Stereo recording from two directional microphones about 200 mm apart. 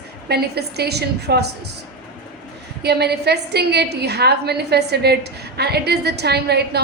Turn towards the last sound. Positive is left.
turn(degrees=-55)  # may be behind; listen again after turning